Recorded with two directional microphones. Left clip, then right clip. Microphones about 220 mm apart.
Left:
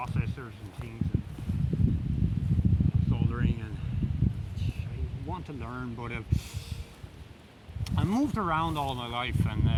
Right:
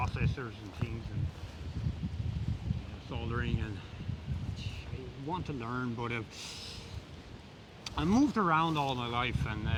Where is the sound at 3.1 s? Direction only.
5° right (ahead or behind).